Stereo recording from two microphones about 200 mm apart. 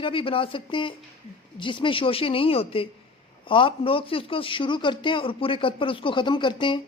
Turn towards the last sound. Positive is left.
turn(degrees=25)  # may be behind; listen again after turning